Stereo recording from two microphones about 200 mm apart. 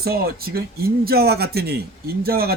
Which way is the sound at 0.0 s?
50° right (ahead or behind).